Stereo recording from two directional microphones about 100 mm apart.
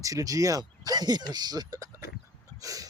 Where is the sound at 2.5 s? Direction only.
35° right (ahead or behind).